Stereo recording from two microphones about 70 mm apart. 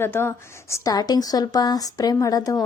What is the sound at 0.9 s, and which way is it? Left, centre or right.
Speech, left.